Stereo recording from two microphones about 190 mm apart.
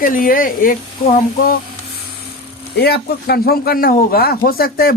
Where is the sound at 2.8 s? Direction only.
55° left (ahead or behind).